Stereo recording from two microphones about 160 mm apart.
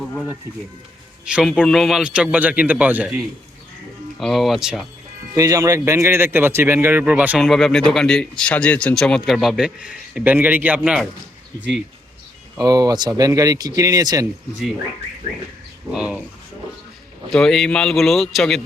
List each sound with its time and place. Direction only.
1.3 s a man's voice: 5° right (ahead or behind)
5.3 s speech: 20° right (ahead or behind)
7.4 s a man's voice: centre (ahead or behind)
12.5 s speech: 25° right (ahead or behind)
15.9 s speech: 5° right (ahead or behind)
17.3 s a man's voice: 5° left (ahead or behind)